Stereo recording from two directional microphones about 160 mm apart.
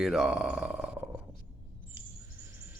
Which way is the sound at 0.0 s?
5° right (ahead or behind).